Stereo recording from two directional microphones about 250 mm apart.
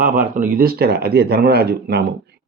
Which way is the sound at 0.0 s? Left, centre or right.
Right.